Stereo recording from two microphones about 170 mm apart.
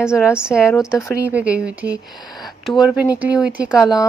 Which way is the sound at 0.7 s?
15° left (ahead or behind).